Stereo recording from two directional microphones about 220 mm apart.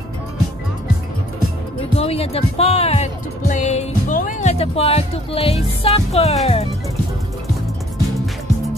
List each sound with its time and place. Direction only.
2.0 s speech: 25° left (ahead or behind)